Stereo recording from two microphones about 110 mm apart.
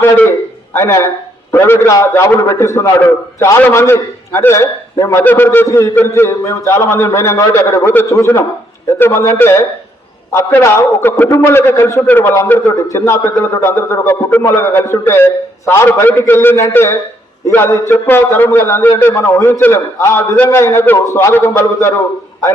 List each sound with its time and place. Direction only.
0.0 s a man's voice: 20° left (ahead or behind)